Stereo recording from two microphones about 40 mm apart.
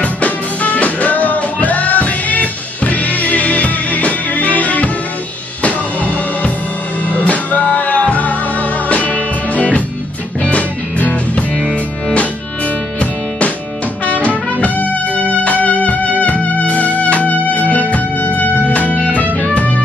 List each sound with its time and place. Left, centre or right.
0.0 s music: left
14.0 s music: left